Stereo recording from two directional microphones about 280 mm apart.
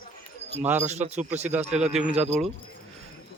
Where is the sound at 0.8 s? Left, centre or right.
Right.